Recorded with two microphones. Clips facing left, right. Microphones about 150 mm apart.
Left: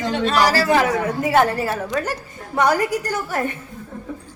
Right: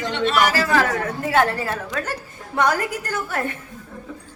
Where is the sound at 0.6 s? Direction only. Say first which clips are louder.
Left 3 dB; 20° left (ahead or behind).